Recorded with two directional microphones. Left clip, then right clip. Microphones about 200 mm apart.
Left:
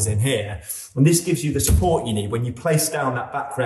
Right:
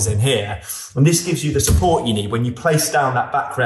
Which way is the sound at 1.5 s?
15° right (ahead or behind).